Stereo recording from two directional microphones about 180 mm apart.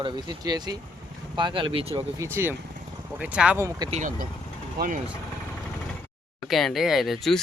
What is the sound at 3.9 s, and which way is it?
Speech, 45° right (ahead or behind).